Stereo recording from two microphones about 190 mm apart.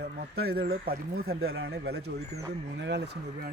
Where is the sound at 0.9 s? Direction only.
50° right (ahead or behind).